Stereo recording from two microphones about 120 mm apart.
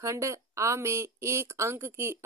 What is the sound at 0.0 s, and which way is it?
A woman's voice, 25° right (ahead or behind).